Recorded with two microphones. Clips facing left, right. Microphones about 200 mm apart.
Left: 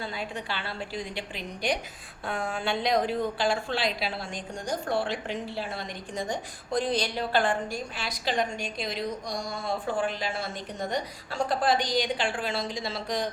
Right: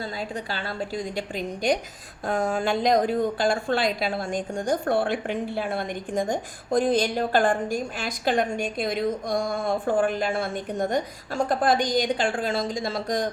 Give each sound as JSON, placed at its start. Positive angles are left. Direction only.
{"t": 0.0, "sound": "a woman's voice", "side_deg": -40}